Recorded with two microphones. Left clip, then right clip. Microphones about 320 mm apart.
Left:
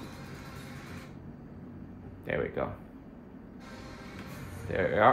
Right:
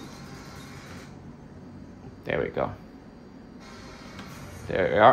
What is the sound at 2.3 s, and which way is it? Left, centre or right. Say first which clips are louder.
Speech: right 5 dB; right.